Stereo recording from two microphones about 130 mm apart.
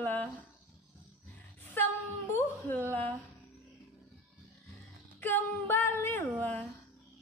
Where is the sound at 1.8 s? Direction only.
15° left (ahead or behind).